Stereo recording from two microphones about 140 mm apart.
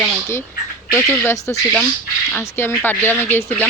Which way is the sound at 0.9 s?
10° left (ahead or behind).